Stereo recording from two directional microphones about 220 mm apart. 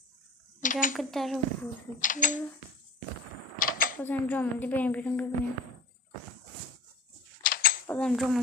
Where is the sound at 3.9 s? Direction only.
10° left (ahead or behind).